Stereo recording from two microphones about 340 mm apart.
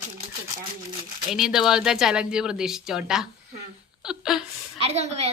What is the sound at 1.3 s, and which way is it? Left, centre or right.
A child's voice, centre.